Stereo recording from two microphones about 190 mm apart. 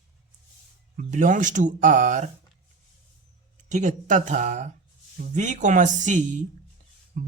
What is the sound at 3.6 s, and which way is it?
Speech, 40° right (ahead or behind).